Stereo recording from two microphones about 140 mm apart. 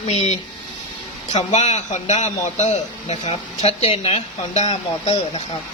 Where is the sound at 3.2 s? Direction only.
45° left (ahead or behind).